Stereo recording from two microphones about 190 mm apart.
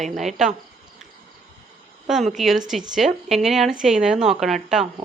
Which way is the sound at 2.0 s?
Centre (ahead or behind).